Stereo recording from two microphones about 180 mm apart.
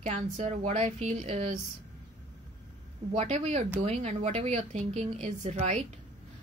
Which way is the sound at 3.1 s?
35° right (ahead or behind).